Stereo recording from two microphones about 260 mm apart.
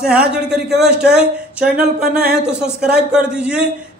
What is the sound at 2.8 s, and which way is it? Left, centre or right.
Speech, centre.